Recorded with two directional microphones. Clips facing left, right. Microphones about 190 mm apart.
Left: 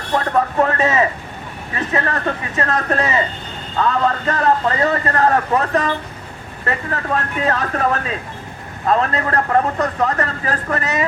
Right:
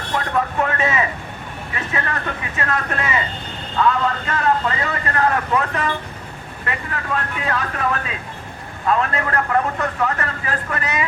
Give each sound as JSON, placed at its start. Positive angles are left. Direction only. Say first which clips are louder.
{"t": 0.3, "sound": "a man's voice", "louder": "left 4 dB", "side_deg": 40}